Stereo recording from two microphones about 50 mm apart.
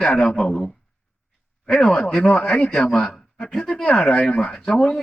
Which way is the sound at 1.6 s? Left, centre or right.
Centre.